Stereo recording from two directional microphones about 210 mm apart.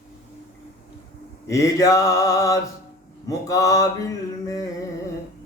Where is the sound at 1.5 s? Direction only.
15° left (ahead or behind).